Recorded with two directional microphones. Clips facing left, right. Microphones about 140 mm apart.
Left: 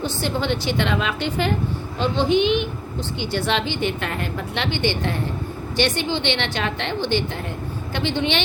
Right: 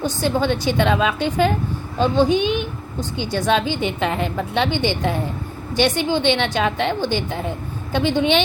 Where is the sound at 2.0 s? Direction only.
45° right (ahead or behind).